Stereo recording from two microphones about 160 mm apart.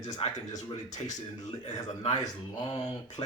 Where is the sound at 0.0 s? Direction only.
45° left (ahead or behind).